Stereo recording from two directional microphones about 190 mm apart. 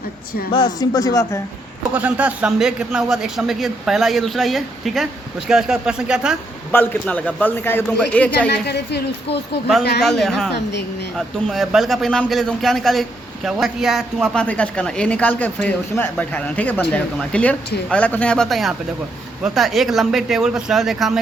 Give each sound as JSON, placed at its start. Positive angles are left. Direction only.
{"t": 0.5, "sound": "speech", "side_deg": 20}
{"t": 1.9, "sound": "a man's voice", "side_deg": -5}
{"t": 6.7, "sound": "a man's voice", "side_deg": 10}
{"t": 8.4, "sound": "speech", "side_deg": 60}
{"t": 10.0, "sound": "a man's voice", "side_deg": 0}
{"t": 10.5, "sound": "speech", "side_deg": 60}
{"t": 11.2, "sound": "a man's voice", "side_deg": 0}